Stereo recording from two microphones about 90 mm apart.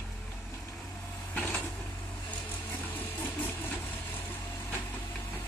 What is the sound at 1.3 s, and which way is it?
Vehicle, 10° left (ahead or behind).